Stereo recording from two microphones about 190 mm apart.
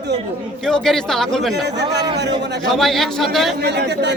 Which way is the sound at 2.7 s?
Centre (ahead or behind).